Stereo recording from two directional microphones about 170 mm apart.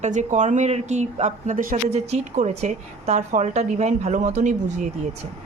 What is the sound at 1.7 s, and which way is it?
Speech, 40° right (ahead or behind).